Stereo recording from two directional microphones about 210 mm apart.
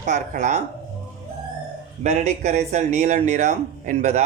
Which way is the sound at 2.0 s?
35° right (ahead or behind).